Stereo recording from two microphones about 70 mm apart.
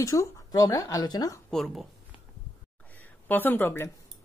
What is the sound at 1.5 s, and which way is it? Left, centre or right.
Speech, centre.